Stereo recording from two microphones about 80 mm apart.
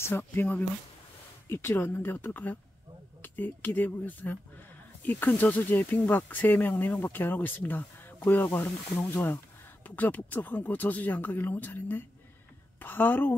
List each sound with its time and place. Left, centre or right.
0.0 s a woman's voice: left